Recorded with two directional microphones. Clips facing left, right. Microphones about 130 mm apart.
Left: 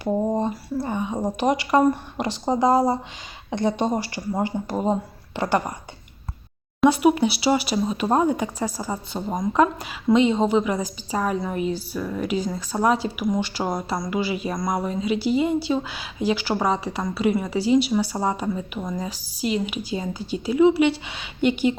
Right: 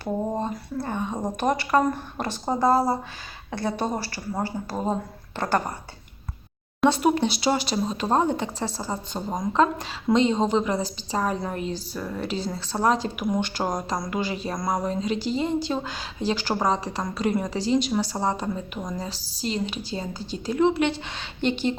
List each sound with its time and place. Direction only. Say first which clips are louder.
0.0 s speech: left 4 dB; 15° left (ahead or behind)
6.8 s speech: left 3 dB; 10° left (ahead or behind)